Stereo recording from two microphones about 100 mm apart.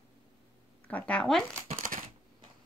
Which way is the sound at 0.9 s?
15° left (ahead or behind).